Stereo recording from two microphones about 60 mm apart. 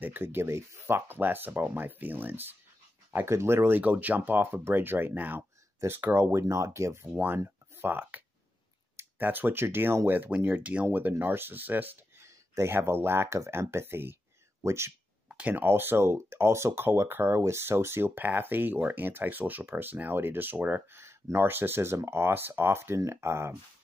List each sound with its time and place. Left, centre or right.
0.0 s speech: right
3.3 s speech: right
3.8 s speech: right
6.4 s speech: right
7.2 s speech: right
9.2 s speech: right
12.2 s speech: right
14.6 s speech: right
15.2 s a sound: right
15.6 s speech: right
20.9 s speech: right